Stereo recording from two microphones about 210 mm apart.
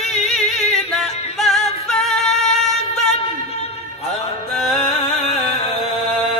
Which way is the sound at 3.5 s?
30° left (ahead or behind).